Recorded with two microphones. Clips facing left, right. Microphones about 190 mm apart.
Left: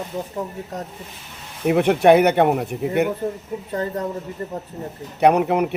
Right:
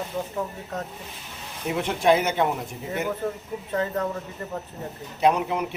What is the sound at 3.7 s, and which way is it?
Speech, 35° left (ahead or behind).